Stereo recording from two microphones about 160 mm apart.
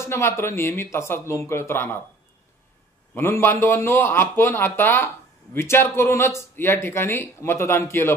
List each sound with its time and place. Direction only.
0.0 s speech: 15° left (ahead or behind)
3.2 s speech: 15° left (ahead or behind)